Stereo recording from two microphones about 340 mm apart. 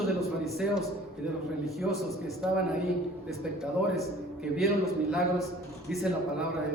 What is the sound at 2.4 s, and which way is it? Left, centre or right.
Speech, centre.